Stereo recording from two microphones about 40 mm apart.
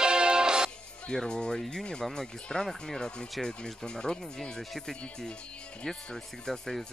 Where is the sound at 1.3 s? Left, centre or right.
Left.